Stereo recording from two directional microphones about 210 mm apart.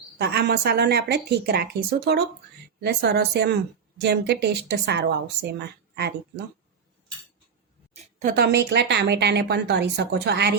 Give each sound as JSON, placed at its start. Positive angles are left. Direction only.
{"t": 0.2, "sound": "a woman's voice", "side_deg": -50}
{"t": 8.2, "sound": "a woman's voice", "side_deg": -45}